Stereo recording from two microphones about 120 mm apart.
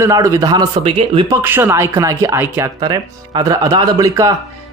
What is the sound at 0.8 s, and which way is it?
Speech, 50° right (ahead or behind).